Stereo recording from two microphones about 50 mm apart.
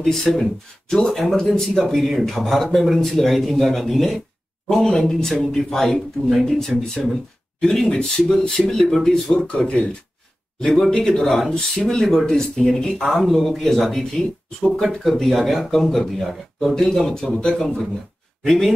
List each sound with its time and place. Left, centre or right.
0.0 s speech: centre
2.0 s a man's voice: centre
7.6 s a man's voice: centre
8.3 s a man's voice: centre